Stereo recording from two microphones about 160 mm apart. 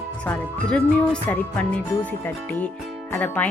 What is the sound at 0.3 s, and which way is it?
Speech, 10° left (ahead or behind).